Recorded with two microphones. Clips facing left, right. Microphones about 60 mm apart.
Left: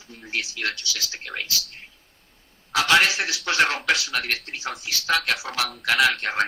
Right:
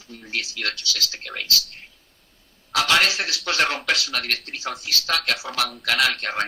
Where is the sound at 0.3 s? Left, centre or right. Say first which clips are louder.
Even; left.